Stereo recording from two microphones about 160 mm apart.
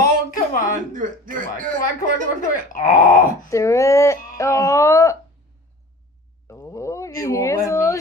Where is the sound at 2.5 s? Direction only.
55° left (ahead or behind).